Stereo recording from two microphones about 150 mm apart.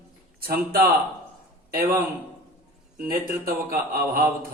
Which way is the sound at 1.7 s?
80° right.